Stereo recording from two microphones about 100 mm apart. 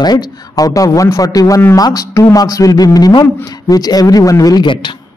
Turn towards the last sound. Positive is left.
turn(degrees=55)  # may be behind; listen again after turning